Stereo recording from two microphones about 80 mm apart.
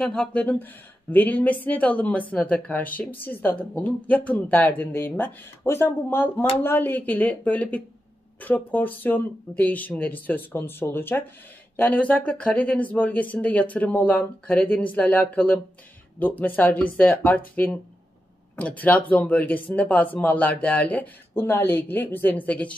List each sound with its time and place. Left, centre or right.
0.0 s speech: centre